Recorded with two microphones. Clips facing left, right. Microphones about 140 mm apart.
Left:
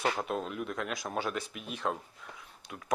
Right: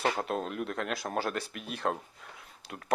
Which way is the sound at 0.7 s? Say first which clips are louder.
Right 2 dB; 60° right (ahead or behind).